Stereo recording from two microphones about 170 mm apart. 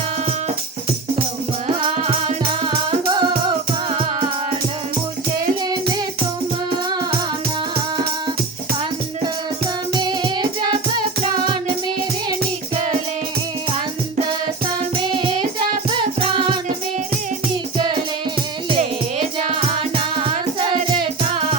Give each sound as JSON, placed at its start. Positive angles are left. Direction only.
{"t": 1.8, "sound": "music", "side_deg": -30}
{"t": 9.9, "sound": "music", "side_deg": -25}
{"t": 14.9, "sound": "music", "side_deg": -30}
{"t": 17.7, "sound": "music", "side_deg": -25}